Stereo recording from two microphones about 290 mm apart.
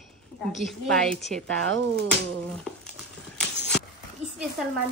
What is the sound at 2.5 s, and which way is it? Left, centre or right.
Crumpling, centre.